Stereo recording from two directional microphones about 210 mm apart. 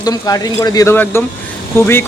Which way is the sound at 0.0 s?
15° left (ahead or behind).